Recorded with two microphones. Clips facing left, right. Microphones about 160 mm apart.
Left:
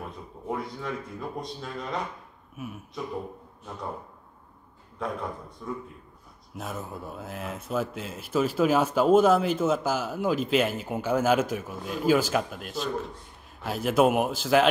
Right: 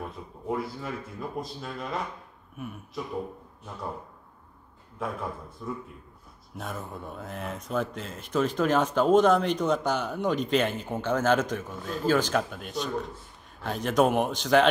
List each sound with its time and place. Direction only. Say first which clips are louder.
0.5 s speech: right 1 dB; 5° right (ahead or behind)
5.0 s speech: left 1 dB; 5° right (ahead or behind)
6.5 s speech: left 1 dB; centre (ahead or behind)